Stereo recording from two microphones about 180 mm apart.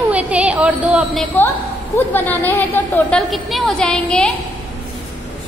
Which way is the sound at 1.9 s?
10° left (ahead or behind).